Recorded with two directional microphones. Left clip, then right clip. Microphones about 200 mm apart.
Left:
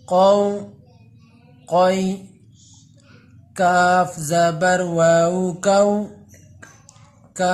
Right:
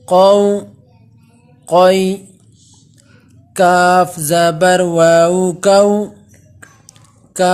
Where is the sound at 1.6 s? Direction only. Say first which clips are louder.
Right 7 dB; 45° right (ahead or behind).